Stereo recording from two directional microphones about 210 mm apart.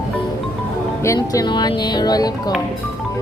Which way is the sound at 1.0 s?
15° left (ahead or behind).